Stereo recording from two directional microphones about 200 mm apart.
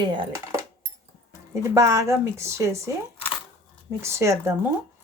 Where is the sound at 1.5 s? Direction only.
15° right (ahead or behind).